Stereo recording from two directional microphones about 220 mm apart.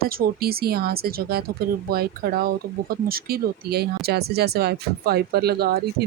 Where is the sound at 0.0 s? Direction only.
45° right (ahead or behind).